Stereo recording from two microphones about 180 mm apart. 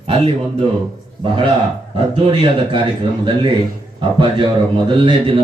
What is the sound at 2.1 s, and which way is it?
Speech, 30° right (ahead or behind).